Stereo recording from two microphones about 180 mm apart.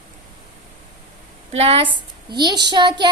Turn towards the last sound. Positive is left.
turn(degrees=-25)  # may be behind; listen again after turning